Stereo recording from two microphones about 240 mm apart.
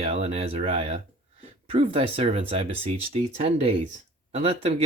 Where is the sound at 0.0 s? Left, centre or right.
Right.